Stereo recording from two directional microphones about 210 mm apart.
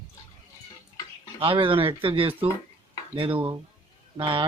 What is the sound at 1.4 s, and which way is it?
Speech, 25° right (ahead or behind).